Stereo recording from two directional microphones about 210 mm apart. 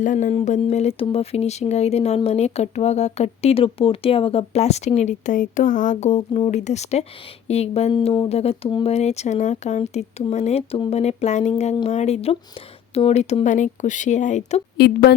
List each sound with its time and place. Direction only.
0.0 s speech: 35° left (ahead or behind)
14.8 s speech: 50° left (ahead or behind)